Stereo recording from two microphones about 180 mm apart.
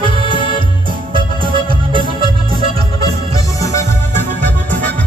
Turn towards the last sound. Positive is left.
turn(degrees=10)  # may be behind; listen again after turning